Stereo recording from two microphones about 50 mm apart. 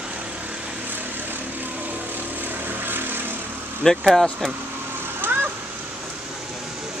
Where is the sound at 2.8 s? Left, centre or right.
Right.